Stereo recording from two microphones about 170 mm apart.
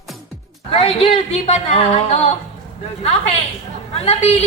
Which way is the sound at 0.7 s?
35° left (ahead or behind).